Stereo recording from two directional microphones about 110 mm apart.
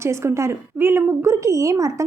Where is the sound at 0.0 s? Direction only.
25° right (ahead or behind).